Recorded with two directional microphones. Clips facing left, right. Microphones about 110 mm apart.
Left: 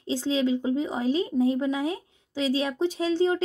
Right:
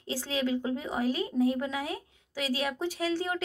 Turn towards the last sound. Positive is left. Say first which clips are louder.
# left 7 dB
turn(degrees=25)  # may be behind; listen again after turning